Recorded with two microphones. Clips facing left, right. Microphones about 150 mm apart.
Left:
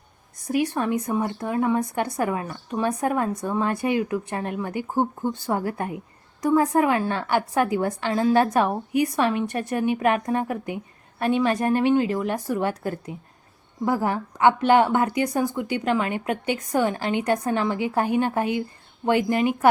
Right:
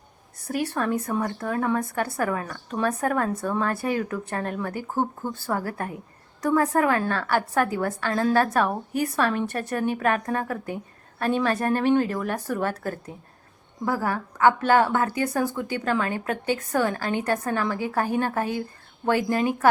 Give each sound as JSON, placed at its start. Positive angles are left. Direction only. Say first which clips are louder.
{"t": 0.6, "sound": "a woman's voice", "louder": "even", "side_deg": 15}